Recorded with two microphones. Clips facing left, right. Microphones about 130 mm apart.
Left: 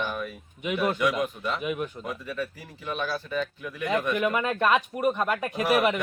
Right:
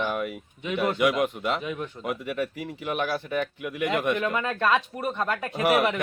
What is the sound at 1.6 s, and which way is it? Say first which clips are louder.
Speech: left 2 dB; 15° left (ahead or behind).